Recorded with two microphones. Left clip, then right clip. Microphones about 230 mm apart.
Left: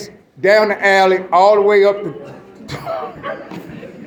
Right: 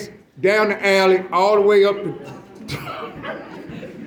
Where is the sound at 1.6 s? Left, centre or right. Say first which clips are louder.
Left 3 dB; right.